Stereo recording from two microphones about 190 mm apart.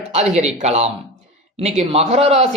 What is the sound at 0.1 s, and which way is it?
Speech, 35° right (ahead or behind).